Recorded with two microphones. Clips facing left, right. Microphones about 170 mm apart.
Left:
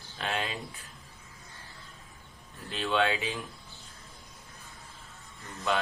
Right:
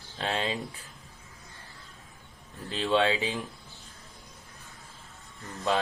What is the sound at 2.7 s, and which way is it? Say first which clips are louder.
Speech: right 3 dB; 30° right (ahead or behind).